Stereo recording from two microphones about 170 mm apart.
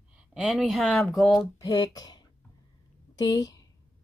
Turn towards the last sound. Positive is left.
turn(degrees=20)  # may be behind; listen again after turning